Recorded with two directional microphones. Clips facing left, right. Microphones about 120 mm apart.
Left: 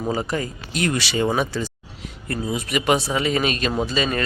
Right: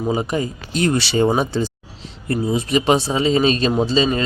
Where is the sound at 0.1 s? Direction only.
20° right (ahead or behind).